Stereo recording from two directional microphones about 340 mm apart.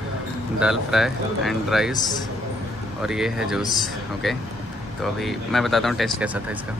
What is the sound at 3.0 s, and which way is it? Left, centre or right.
Speech, centre.